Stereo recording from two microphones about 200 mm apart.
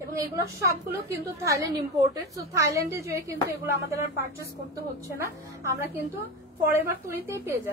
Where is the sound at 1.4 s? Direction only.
15° right (ahead or behind).